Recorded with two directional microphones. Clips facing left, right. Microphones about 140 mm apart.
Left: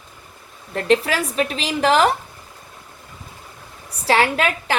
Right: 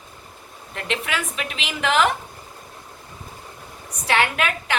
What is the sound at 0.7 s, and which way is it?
A woman's voice, 40° left (ahead or behind).